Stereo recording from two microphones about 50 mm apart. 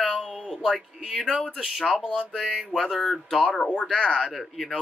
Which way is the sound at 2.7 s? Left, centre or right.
Centre.